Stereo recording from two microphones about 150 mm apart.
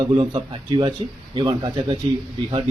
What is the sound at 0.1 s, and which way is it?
A man's voice, 35° right (ahead or behind).